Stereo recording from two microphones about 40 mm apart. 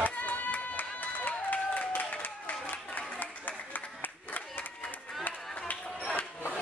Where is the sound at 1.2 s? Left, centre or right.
Left.